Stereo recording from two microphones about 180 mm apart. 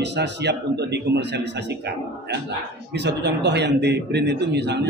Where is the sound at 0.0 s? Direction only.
75° right (ahead or behind).